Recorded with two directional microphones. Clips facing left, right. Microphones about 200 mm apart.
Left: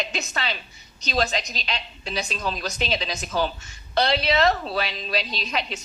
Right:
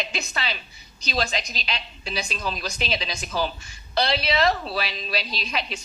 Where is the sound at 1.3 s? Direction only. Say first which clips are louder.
Left 1 dB; centre (ahead or behind).